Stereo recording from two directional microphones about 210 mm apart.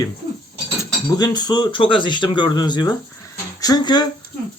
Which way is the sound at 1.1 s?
20° left (ahead or behind).